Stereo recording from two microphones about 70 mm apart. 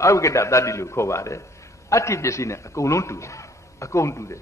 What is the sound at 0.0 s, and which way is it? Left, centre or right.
A man's voice, left.